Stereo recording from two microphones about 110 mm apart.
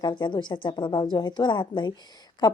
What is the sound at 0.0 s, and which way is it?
A woman's voice, 45° left (ahead or behind).